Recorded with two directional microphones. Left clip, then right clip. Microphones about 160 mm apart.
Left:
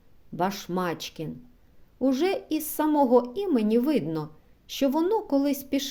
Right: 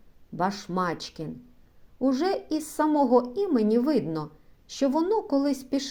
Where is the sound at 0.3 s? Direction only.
20° left (ahead or behind).